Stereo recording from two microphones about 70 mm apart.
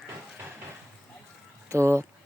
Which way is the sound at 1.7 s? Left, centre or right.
Right.